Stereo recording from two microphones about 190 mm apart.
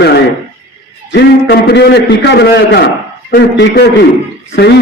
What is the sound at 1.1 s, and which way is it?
A man's voice, 60° left (ahead or behind).